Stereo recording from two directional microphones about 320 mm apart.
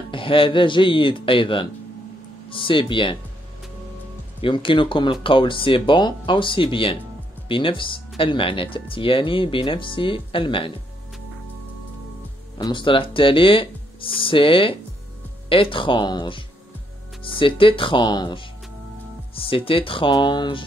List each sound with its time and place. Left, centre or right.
0.1 s speech: centre
4.4 s speech: centre
12.5 s speech: centre